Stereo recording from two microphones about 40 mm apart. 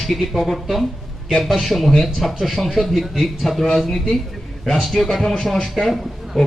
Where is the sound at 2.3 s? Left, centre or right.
Centre.